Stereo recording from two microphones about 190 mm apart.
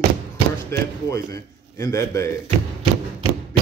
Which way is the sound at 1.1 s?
15° left (ahead or behind).